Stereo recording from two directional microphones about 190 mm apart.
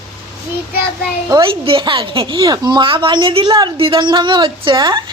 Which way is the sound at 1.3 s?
25° right (ahead or behind).